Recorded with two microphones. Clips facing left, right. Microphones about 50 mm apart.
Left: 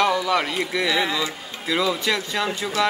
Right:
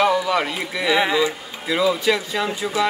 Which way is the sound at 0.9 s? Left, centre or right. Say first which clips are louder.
Right 5 dB; centre.